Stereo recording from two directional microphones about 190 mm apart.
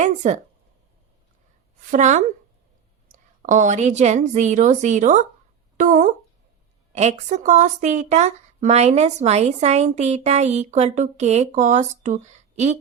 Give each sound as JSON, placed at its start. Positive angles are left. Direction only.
{"t": 0.0, "sound": "speech", "side_deg": -35}
{"t": 1.9, "sound": "speech", "side_deg": -40}
{"t": 3.4, "sound": "speech", "side_deg": -40}